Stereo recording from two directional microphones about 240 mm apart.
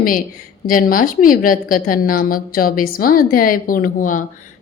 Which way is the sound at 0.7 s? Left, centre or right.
Left.